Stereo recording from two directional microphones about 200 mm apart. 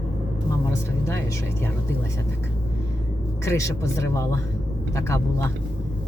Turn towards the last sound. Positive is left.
turn(degrees=15)  # may be behind; listen again after turning